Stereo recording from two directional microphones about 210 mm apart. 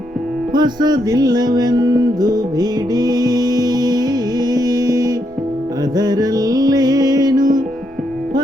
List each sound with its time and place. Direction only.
0.5 s music: 20° right (ahead or behind)